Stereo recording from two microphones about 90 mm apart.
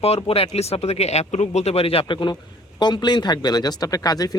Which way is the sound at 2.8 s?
55° left (ahead or behind).